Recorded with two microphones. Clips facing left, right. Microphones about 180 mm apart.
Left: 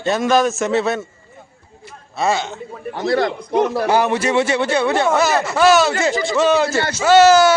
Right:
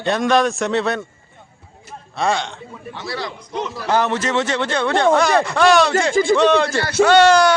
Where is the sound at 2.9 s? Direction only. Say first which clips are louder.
Left 10 dB; 50° left (ahead or behind).